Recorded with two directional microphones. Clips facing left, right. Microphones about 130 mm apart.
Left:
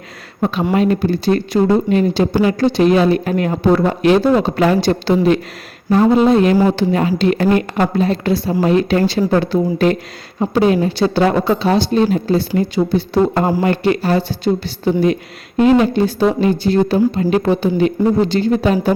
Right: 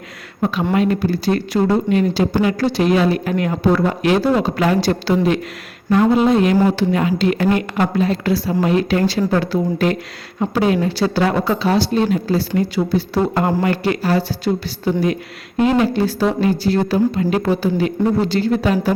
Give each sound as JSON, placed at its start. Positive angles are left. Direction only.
{"t": 0.7, "sound": "a woman's voice", "side_deg": 25}